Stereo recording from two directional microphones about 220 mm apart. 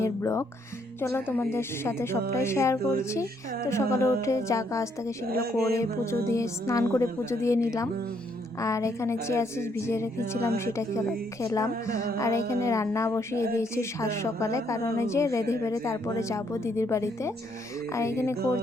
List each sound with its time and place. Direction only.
0.0 s speech: 15° left (ahead or behind)
5.2 s a sound: 45° right (ahead or behind)
5.7 s speech: 15° left (ahead or behind)